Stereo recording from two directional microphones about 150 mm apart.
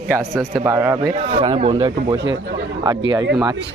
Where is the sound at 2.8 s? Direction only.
25° right (ahead or behind).